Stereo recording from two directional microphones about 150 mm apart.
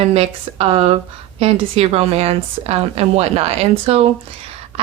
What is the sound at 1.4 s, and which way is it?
A woman's voice, 40° right (ahead or behind).